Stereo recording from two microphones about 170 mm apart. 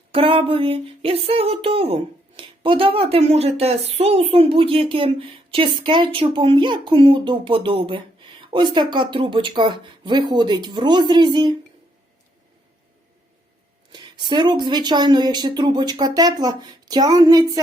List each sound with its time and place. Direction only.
0.1 s speech: 30° right (ahead or behind)
13.9 s a sound: 25° right (ahead or behind)
14.6 s speech: 25° right (ahead or behind)